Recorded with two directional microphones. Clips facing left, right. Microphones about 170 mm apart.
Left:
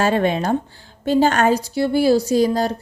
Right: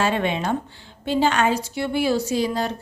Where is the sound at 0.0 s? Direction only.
40° left (ahead or behind).